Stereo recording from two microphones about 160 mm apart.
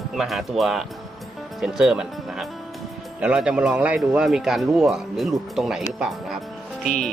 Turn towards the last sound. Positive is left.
turn(degrees=0)  # may be behind; listen again after turning